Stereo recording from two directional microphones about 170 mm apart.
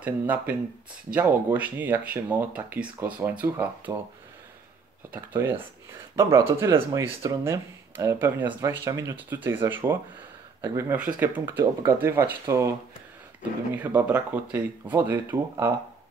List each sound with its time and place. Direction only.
0.0 s speech: 10° right (ahead or behind)
5.1 s speech: 10° right (ahead or behind)